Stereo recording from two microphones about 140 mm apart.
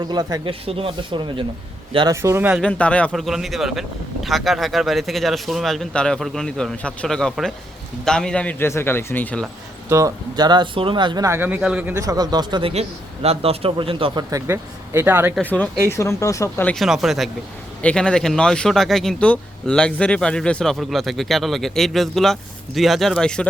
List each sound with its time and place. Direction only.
0.0 s speech: 30° right (ahead or behind)
0.4 s speech: 45° right (ahead or behind)
2.2 s speech: 15° right (ahead or behind)
2.6 s a man's voice: 10° left (ahead or behind)
3.1 s a man's voice: centre (ahead or behind)
9.9 s speech: 25° right (ahead or behind)
11.3 s speech: 15° right (ahead or behind)
11.9 s speech: 25° right (ahead or behind)
13.2 s a man's voice: 45° right (ahead or behind)
14.3 s speech: 20° right (ahead or behind)
15.4 s a man's voice: 10° left (ahead or behind)
16.6 s speech: centre (ahead or behind)